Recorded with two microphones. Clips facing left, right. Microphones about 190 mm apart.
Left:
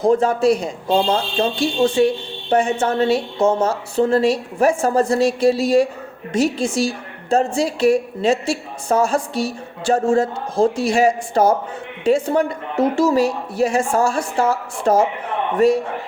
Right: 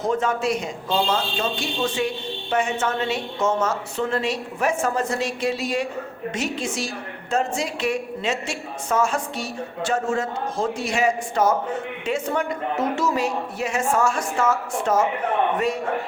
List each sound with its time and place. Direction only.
0.0 s speech: 35° left (ahead or behind)